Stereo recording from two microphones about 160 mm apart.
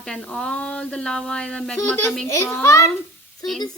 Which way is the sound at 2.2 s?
15° left (ahead or behind).